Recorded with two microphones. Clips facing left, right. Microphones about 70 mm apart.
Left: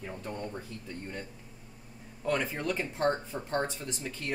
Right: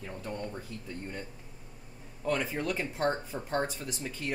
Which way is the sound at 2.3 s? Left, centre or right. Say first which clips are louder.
Even; centre.